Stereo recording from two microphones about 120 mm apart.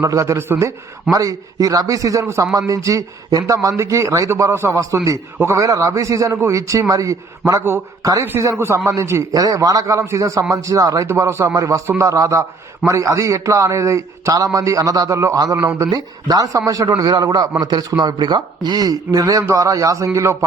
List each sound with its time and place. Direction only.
0.0 s a man's voice: 25° right (ahead or behind)